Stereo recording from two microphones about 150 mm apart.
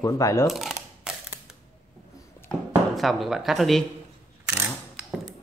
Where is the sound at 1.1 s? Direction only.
5° right (ahead or behind).